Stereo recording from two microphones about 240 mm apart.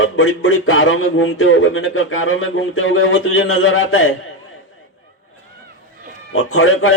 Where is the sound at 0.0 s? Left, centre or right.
Left.